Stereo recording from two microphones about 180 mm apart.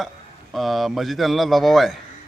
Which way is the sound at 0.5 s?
Centre (ahead or behind).